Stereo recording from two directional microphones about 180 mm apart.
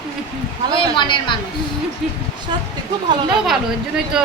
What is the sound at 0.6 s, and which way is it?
Speech, 25° right (ahead or behind).